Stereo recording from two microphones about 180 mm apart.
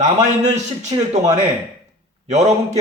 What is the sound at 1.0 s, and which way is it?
A man's voice, 40° right (ahead or behind).